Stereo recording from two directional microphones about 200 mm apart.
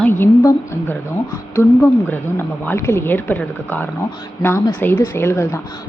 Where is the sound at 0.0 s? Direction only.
10° left (ahead or behind).